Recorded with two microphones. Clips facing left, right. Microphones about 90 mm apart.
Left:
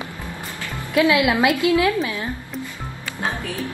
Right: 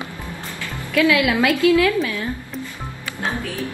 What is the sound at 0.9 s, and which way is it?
A woman's voice, 20° left (ahead or behind).